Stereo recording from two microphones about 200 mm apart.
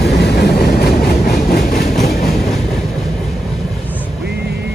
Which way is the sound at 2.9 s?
Centre (ahead or behind).